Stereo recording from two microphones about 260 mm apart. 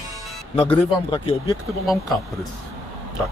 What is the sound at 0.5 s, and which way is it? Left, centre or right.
Speech, left.